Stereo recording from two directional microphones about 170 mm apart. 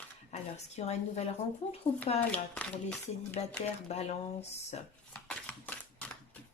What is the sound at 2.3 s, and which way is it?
Speech, 5° left (ahead or behind).